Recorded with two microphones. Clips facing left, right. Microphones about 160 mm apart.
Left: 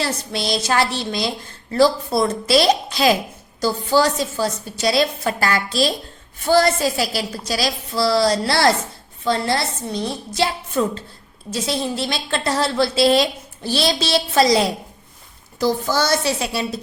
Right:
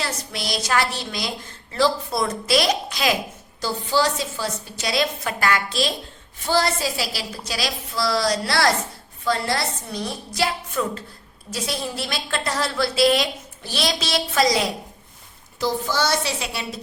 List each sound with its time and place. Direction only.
0.0 s a woman's voice: 30° left (ahead or behind)
3.6 s a woman's voice: 45° left (ahead or behind)
6.5 s a woman's voice: 50° left (ahead or behind); by 14.7 s 30° left (ahead or behind)
15.6 s a woman's voice: 45° left (ahead or behind)